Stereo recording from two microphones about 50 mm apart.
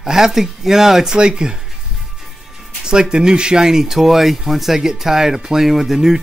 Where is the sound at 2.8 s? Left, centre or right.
Centre.